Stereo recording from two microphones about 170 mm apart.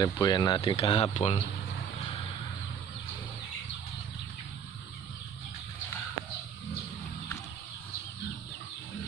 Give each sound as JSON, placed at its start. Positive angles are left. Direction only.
{"t": 0.0, "sound": "speech", "side_deg": 20}